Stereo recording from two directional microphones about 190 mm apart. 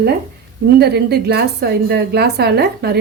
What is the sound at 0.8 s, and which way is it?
A woman's voice, 60° right (ahead or behind).